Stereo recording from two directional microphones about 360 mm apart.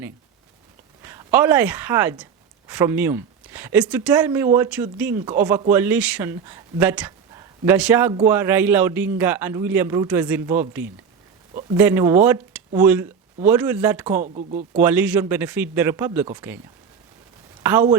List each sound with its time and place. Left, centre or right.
1.0 s a woman's voice: centre
14.2 s speech: right
14.8 s speech: centre
17.6 s speech: centre